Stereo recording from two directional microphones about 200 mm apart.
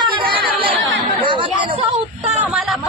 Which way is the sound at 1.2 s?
25° right (ahead or behind).